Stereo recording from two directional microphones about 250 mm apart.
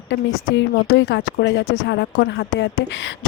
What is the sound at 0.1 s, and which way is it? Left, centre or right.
Speech, left.